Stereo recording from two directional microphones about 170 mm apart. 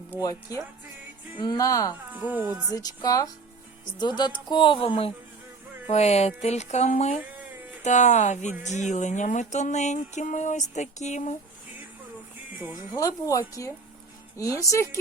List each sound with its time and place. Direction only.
0.2 s a woman's voice: 20° left (ahead or behind)
2.1 s speech: 10° right (ahead or behind)
2.7 s a woman's voice: 20° left (ahead or behind); by 7.2 s 40° left (ahead or behind)
7.9 s music: 45° left (ahead or behind)
12.7 s a woman's voice: 20° left (ahead or behind)